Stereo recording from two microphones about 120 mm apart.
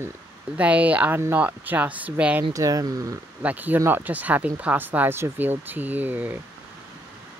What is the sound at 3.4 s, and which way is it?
Speech, 15° right (ahead or behind).